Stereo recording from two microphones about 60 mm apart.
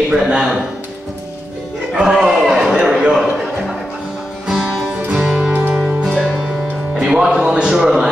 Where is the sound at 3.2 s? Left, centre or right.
Centre.